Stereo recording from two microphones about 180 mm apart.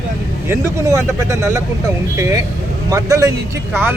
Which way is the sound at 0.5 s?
15° right (ahead or behind).